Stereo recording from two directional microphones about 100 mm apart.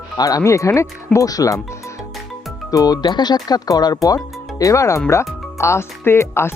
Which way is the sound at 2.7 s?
40° left (ahead or behind).